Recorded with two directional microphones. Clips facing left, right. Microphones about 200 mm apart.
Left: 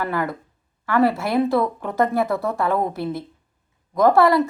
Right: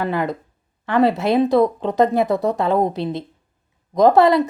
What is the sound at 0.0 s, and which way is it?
A woman's voice, 20° right (ahead or behind).